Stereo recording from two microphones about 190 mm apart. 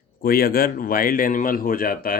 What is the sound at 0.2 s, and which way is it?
Speech, 50° left (ahead or behind).